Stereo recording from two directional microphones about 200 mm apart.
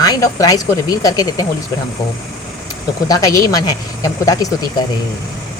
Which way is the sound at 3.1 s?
15° left (ahead or behind).